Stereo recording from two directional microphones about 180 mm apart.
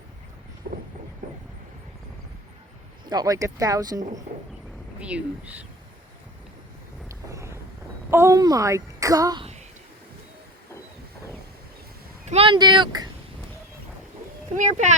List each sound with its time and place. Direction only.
0.7 s vehicle: 55° right (ahead or behind)
3.1 s a woman's voice: 20° right (ahead or behind)
4.9 s speech: 5° right (ahead or behind)
7.1 s vehicle: 15° right (ahead or behind)
8.1 s a woman's voice: 15° right (ahead or behind)
12.2 s a woman's voice: 35° right (ahead or behind)
14.5 s speech: 45° right (ahead or behind)